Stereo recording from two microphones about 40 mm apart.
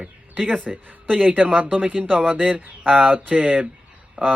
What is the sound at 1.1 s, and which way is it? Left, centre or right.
Speech, right.